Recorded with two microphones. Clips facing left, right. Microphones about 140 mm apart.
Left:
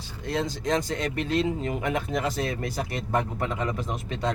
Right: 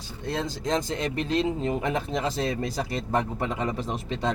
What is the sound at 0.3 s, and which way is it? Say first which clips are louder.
Speech: left 1 dB; 25° right (ahead or behind).